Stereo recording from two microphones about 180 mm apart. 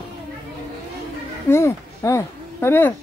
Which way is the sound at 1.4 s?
15° left (ahead or behind).